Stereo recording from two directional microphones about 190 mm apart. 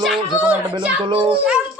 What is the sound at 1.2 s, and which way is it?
Speech, 5° right (ahead or behind).